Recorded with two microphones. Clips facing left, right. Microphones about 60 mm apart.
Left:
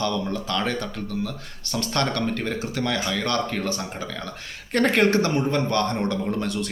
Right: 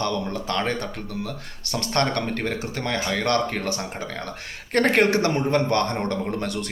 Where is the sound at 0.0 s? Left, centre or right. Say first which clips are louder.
Even; right.